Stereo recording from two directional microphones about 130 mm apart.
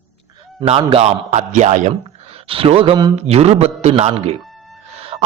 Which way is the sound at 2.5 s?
45° right (ahead or behind).